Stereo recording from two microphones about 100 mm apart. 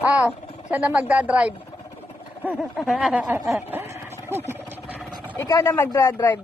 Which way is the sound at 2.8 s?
5° right (ahead or behind).